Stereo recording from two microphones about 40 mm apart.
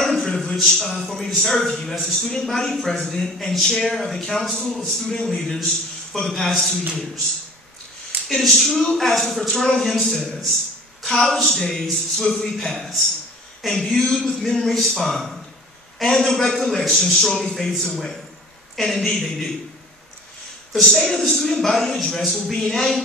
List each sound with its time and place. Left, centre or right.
0.0 s a sound: centre
0.5 s a man's voice: centre
8.3 s a woman's voice: centre
11.0 s a sound: centre
11.2 s a man's voice: centre
17.4 s a man's voice: centre
17.6 s a man's voice: centre
20.8 s a man's voice: centre